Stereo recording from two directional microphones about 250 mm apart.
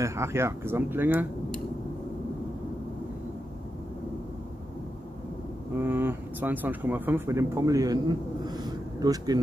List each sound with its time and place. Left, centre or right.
0.0 s speech: centre
5.8 s speech: centre
8.5 s a sound: centre